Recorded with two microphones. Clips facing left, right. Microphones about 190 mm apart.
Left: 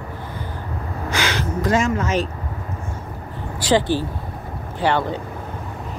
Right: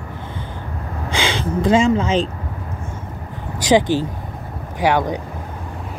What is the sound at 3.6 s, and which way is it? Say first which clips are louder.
Speech: right 3 dB; 15° right (ahead or behind).